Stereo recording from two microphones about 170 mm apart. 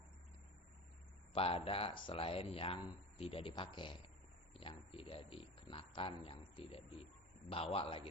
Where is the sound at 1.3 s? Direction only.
35° left (ahead or behind).